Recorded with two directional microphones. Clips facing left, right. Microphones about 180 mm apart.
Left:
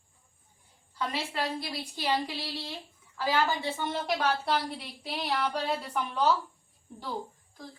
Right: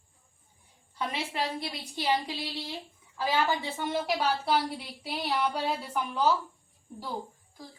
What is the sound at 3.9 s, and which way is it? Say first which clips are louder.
Speech: right 2 dB; 10° right (ahead or behind).